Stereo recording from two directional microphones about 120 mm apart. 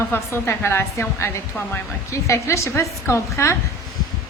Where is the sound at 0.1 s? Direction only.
20° left (ahead or behind).